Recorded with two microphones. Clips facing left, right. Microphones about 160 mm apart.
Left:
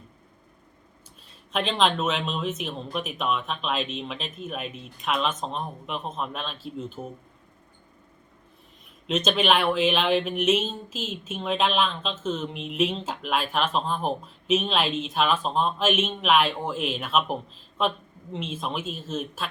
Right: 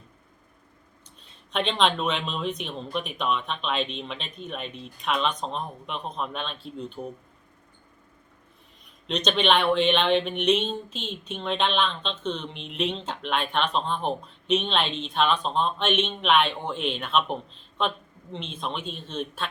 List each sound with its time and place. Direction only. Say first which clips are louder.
1.5 s speech: even; centre (ahead or behind)
9.0 s speech: left 1 dB; 5° left (ahead or behind)